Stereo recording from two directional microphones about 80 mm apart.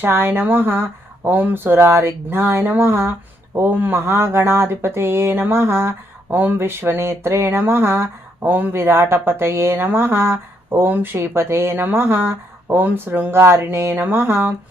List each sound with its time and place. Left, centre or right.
0.0 s speech: right